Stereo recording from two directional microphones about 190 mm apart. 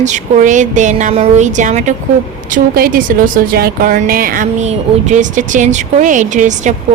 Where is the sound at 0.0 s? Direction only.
40° right (ahead or behind).